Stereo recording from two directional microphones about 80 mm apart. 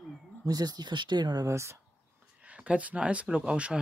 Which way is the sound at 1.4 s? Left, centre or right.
Right.